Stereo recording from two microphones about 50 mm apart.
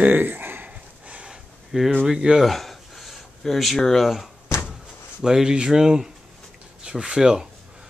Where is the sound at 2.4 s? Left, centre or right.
Centre.